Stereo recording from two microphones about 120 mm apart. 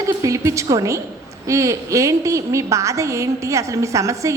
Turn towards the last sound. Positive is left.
turn(degrees=-25)  # may be behind; listen again after turning